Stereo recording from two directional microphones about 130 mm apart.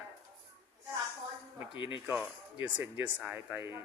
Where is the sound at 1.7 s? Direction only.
40° left (ahead or behind).